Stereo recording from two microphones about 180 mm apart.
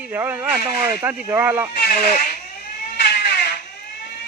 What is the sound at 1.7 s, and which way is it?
Speech, 55° left (ahead or behind).